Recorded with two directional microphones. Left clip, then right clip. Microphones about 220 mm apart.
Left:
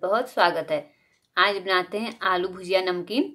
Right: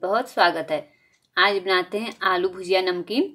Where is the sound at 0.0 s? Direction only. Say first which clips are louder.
Right 1 dB; 5° right (ahead or behind).